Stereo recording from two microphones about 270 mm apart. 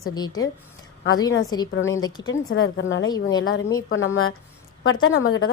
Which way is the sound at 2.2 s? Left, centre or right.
Left.